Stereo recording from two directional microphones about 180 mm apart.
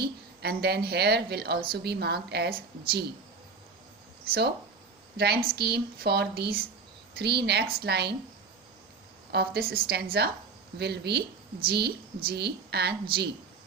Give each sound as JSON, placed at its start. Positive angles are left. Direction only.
{"t": 0.0, "sound": "a woman's voice", "side_deg": -65}
{"t": 5.1, "sound": "a woman's voice", "side_deg": -65}
{"t": 9.3, "sound": "a woman's voice", "side_deg": -60}